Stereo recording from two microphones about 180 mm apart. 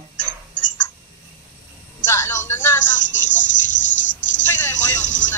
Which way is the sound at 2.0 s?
15° left (ahead or behind).